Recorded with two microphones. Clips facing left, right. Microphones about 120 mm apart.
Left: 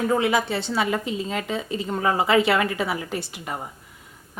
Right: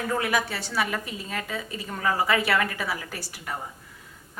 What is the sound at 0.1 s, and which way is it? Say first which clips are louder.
Speech: left 2 dB; 25° left (ahead or behind).